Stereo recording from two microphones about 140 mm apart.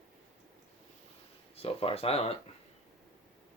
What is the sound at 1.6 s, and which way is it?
Speech, 45° left (ahead or behind).